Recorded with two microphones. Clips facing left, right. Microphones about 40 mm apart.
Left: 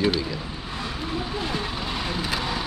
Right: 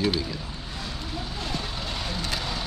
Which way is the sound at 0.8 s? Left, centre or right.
Left.